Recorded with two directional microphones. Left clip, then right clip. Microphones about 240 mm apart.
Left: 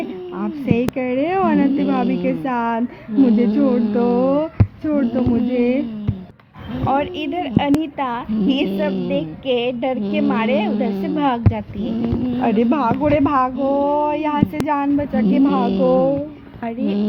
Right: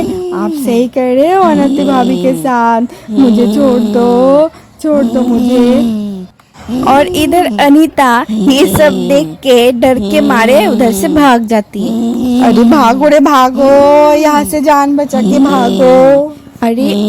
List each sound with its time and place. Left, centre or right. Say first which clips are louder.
0.7 s a woman's voice: right 10 dB; right
5.5 s speech: right 10 dB; right
12.6 s speech: right 11 dB; right
16.6 s speech: right 13 dB; right